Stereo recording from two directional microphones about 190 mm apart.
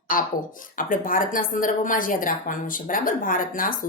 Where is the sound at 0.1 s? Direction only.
45° left (ahead or behind).